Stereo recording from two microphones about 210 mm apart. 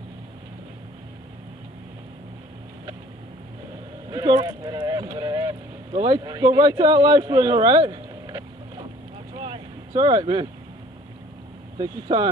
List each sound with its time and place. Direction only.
4.1 s speech: 20° right (ahead or behind)
9.4 s vehicle: 25° right (ahead or behind)
11.8 s speech: 20° right (ahead or behind)